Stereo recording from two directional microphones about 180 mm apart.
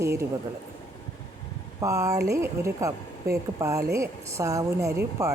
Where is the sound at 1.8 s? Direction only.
20° right (ahead or behind).